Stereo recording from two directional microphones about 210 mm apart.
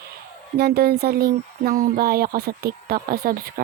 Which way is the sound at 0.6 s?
50° right (ahead or behind).